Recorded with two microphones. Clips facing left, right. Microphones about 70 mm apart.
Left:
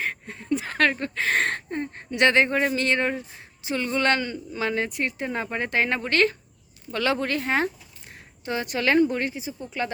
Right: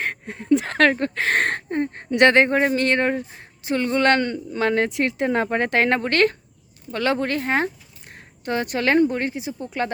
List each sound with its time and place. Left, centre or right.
0.0 s speech: right
6.9 s speech: right